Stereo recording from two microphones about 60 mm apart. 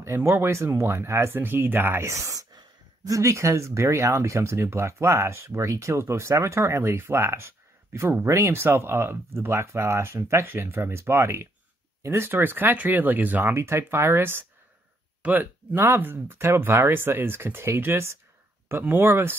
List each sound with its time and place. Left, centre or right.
0.0 s speech: right
10.4 s speech: right
12.3 s speech: right
13.5 s speech: right